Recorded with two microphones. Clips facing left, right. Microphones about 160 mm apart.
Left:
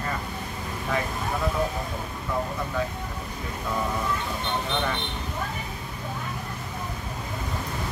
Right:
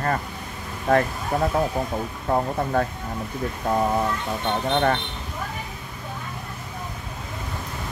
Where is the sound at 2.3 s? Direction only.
60° right (ahead or behind).